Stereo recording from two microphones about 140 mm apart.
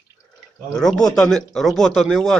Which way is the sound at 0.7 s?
5° left (ahead or behind).